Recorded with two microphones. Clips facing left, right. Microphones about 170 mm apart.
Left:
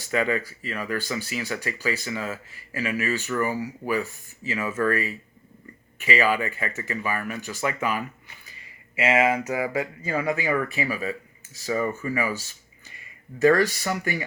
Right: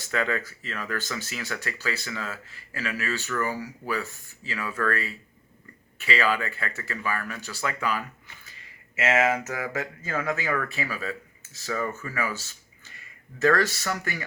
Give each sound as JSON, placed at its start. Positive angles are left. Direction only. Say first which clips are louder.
{"t": 0.1, "sound": "speech", "louder": "left 3 dB", "side_deg": 10}